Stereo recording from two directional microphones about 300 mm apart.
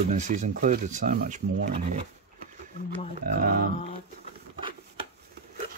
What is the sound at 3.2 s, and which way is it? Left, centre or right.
Speech, right.